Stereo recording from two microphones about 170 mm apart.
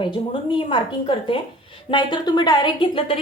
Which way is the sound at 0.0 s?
30° left (ahead or behind).